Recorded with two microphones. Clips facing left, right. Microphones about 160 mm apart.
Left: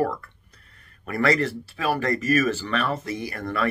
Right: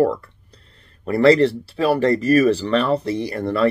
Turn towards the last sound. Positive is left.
turn(degrees=-30)  # may be behind; listen again after turning